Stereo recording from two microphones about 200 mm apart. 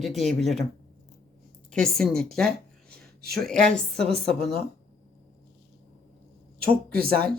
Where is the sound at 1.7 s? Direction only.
5° left (ahead or behind).